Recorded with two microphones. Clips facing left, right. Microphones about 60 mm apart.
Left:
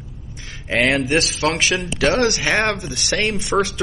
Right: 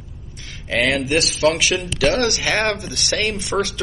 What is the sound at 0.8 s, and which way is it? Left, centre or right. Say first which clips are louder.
Speech: left 1 dB; left.